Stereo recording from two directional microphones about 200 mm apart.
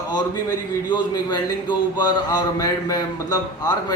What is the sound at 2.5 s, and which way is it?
A man's voice, 20° left (ahead or behind).